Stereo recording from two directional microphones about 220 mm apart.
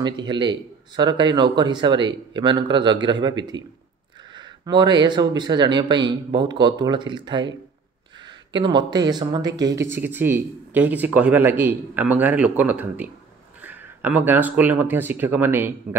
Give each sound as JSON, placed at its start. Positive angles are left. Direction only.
{"t": 0.0, "sound": "speech", "side_deg": -20}